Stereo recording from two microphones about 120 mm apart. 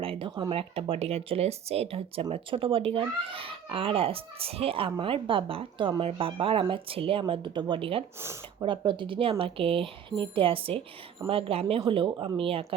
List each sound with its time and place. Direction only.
0.0 s speech: 50° right (ahead or behind)